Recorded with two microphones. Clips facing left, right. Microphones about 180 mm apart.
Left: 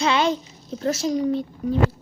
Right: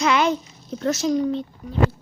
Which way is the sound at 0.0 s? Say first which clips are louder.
Right 1 dB; 30° left (ahead or behind).